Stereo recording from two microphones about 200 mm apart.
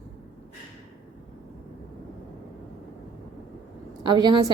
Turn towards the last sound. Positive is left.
turn(degrees=-20)  # may be behind; listen again after turning